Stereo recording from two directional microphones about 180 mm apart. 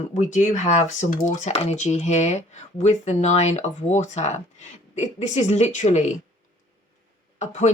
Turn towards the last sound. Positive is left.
turn(degrees=40)  # may be behind; listen again after turning